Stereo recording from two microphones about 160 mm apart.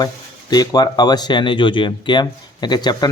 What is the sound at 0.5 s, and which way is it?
Speech, 25° left (ahead or behind).